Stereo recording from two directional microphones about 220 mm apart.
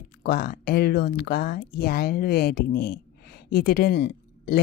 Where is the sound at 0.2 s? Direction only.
45° left (ahead or behind).